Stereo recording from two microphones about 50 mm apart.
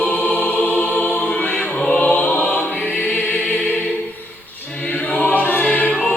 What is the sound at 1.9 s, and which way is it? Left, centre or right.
Music, left.